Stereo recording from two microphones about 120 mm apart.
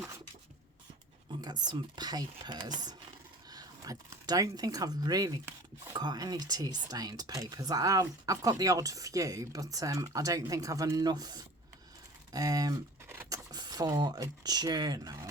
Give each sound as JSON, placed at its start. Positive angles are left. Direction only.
{"t": 1.3, "sound": "speech", "side_deg": -35}